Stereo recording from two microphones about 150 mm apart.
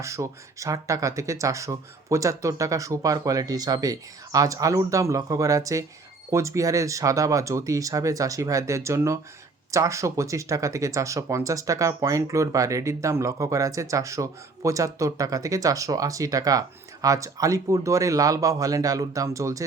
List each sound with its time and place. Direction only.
0.0 s speech: 20° right (ahead or behind)